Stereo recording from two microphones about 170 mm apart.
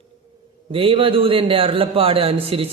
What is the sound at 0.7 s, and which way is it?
A man's voice, 30° right (ahead or behind).